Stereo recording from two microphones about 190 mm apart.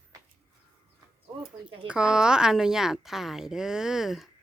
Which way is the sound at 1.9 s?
5° right (ahead or behind).